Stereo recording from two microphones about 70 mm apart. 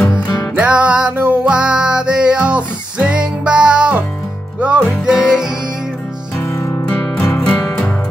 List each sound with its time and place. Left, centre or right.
0.1 s music: left
0.6 s music: centre
6.3 s music: left
7.5 s music: centre